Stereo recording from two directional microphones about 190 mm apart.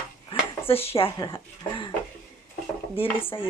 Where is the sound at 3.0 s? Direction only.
30° left (ahead or behind).